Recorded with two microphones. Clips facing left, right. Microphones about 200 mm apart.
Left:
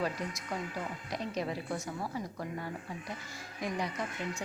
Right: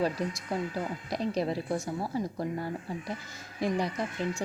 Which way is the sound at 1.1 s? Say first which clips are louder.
Right 6 dB; 35° right (ahead or behind).